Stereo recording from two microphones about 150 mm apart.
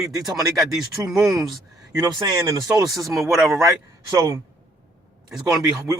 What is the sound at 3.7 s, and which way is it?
Speech, 25° right (ahead or behind).